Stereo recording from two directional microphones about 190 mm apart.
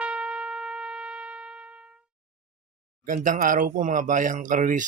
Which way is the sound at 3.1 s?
45° right (ahead or behind).